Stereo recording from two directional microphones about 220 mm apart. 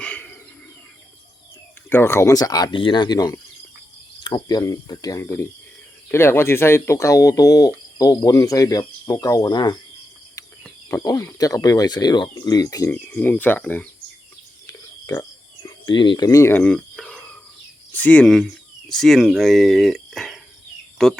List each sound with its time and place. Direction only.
0.0 s a sound: 5° left (ahead or behind)
1.9 s speech: 10° left (ahead or behind)
10.8 s speech: 15° left (ahead or behind)
14.7 s cricket: 15° left (ahead or behind)
17.9 s speech: 5° left (ahead or behind)